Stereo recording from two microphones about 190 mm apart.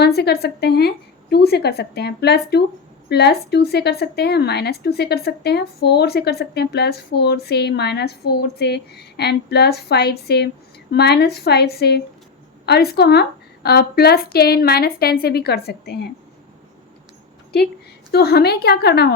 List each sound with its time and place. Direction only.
0.0 s a woman's voice: 60° left (ahead or behind)
18.1 s a woman's voice: 55° left (ahead or behind)